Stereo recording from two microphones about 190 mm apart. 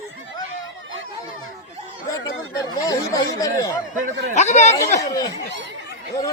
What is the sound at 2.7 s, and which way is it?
Speech, 20° left (ahead or behind).